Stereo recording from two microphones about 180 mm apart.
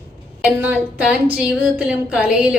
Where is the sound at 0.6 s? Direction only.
10° right (ahead or behind).